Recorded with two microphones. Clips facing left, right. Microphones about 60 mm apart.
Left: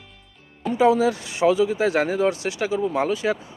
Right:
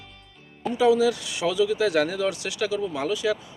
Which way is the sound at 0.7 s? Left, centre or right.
Left.